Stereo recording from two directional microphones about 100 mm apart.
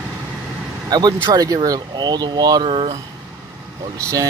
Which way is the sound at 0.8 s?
45° right (ahead or behind).